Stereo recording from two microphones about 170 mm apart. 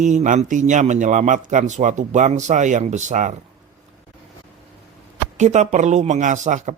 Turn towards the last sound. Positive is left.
turn(degrees=-45)  # may be behind; listen again after turning